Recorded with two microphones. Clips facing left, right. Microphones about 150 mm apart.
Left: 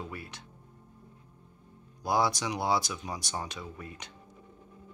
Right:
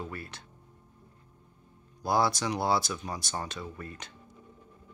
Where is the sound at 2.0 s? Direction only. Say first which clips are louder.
Right 1 dB; 15° left (ahead or behind).